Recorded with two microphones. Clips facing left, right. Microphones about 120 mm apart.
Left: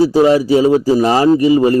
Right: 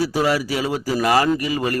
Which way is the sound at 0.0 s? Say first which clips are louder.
Left 9 dB; 25° left (ahead or behind).